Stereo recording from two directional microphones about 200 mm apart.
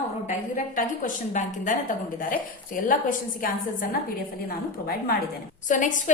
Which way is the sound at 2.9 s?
40° left (ahead or behind).